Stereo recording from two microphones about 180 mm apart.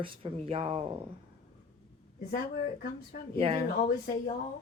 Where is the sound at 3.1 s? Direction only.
65° left (ahead or behind).